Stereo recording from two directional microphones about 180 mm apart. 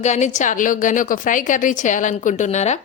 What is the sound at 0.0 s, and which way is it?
Speech, 40° left (ahead or behind).